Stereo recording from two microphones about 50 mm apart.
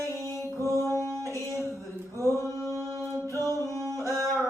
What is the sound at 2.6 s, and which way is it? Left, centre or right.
Mantra, left.